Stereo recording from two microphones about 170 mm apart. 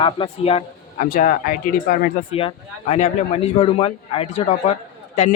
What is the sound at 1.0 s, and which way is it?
A man's voice, 50° left (ahead or behind).